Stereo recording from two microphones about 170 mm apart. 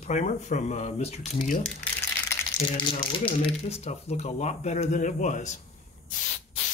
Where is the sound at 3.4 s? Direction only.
40° left (ahead or behind).